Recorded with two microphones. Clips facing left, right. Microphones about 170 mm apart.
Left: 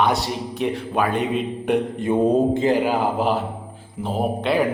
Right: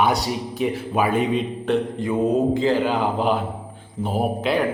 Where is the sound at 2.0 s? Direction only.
30° left (ahead or behind).